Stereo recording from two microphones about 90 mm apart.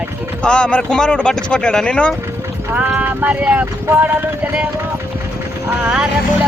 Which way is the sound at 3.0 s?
15° right (ahead or behind).